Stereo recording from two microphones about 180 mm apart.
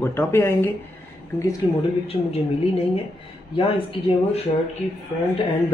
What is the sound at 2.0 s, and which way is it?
Speech, 35° left (ahead or behind).